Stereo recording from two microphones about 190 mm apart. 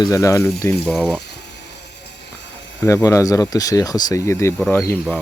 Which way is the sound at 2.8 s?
15° left (ahead or behind).